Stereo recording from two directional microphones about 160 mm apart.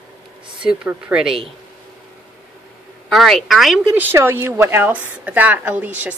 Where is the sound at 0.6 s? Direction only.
5° right (ahead or behind).